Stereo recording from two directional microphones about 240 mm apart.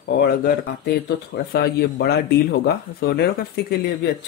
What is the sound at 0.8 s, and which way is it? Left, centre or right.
Speech, left.